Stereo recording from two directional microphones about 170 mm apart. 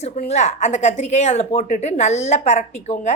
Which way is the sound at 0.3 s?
45° left (ahead or behind).